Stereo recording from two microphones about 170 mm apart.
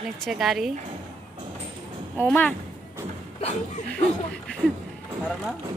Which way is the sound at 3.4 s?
40° left (ahead or behind).